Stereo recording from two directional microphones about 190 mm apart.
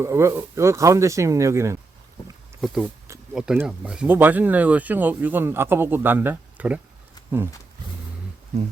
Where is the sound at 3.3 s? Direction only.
5° right (ahead or behind).